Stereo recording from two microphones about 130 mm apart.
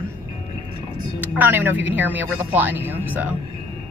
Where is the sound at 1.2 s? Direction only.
15° right (ahead or behind).